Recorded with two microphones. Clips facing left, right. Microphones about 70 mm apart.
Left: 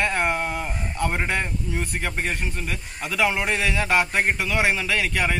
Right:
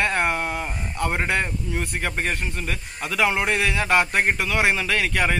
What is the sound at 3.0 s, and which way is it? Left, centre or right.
A man's voice, right.